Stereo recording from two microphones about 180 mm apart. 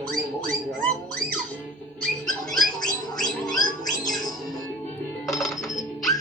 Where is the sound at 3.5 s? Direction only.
20° left (ahead or behind).